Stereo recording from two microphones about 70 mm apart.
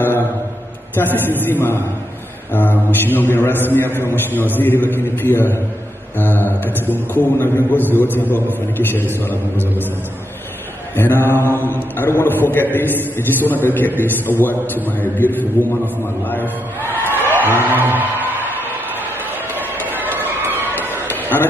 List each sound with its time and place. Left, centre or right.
0.9 s a man's voice: left
11.0 s a man's voice: left
17.3 s music: left
17.6 s music: right
19.5 s run: right
20.7 s a sound: left